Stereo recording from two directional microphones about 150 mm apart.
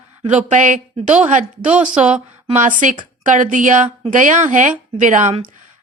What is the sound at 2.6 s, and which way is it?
Speech, 60° right (ahead or behind).